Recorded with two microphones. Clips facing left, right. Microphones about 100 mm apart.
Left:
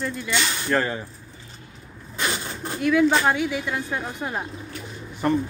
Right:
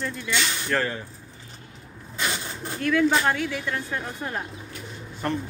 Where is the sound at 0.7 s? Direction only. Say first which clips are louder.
Left 3 dB; 20° left (ahead or behind).